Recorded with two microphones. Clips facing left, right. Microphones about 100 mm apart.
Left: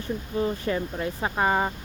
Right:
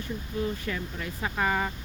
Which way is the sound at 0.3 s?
35° left (ahead or behind).